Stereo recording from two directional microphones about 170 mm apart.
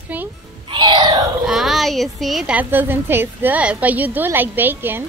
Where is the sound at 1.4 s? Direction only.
Centre (ahead or behind).